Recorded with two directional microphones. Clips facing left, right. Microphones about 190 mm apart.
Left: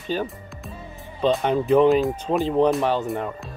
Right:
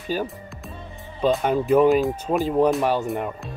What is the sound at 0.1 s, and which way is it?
Speech, 5° right (ahead or behind).